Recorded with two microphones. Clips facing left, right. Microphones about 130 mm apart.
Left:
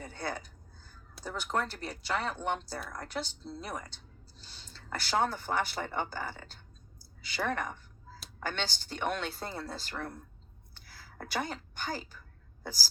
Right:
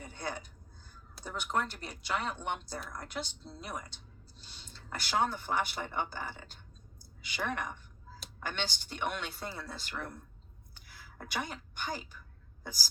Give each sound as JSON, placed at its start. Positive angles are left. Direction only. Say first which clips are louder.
{"t": 0.0, "sound": "a woman's voice", "louder": "left 2 dB", "side_deg": 35}